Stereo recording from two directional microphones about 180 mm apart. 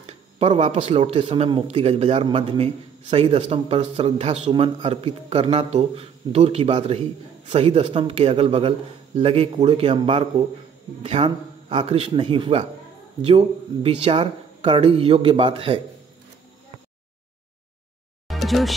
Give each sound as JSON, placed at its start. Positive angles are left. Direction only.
{"t": 0.0, "sound": "speech", "side_deg": -35}
{"t": 18.3, "sound": "music", "side_deg": 0}